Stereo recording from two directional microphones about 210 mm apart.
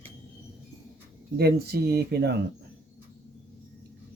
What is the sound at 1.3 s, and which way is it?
Speech, 50° right (ahead or behind).